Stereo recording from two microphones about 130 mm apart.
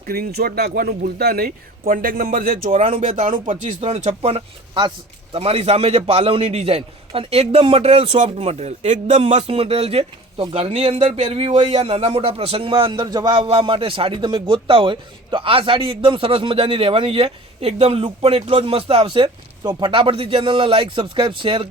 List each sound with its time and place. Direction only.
1.5 s speech: 90° right
3.0 s speech: 75° right (ahead or behind)
9.3 s speech: 50° right (ahead or behind)